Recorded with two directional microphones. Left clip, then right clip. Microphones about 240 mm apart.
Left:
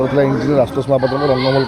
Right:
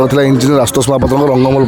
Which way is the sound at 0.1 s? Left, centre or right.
Right.